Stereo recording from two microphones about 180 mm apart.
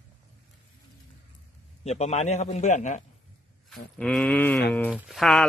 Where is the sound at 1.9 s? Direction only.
35° left (ahead or behind).